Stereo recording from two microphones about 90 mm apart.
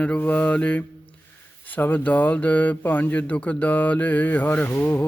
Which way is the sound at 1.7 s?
20° left (ahead or behind).